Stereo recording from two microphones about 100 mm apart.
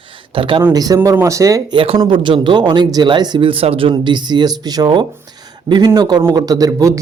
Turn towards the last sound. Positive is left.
turn(degrees=-30)  # may be behind; listen again after turning